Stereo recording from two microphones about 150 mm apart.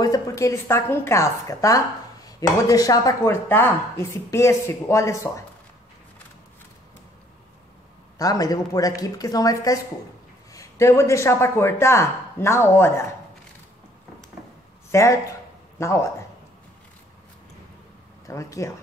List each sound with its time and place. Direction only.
0.0 s speech: 20° left (ahead or behind)
8.2 s a man's voice: 25° left (ahead or behind)
14.9 s speech: 20° left (ahead or behind)
18.2 s speech: 20° left (ahead or behind)